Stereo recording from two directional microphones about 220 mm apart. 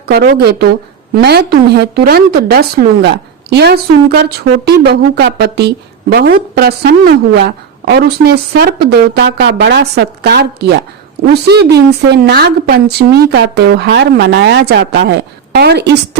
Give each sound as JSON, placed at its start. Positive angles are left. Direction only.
{"t": 0.1, "sound": "a woman's voice", "side_deg": -45}